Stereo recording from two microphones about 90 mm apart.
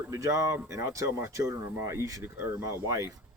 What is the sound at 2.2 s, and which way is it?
Speech, 25° right (ahead or behind).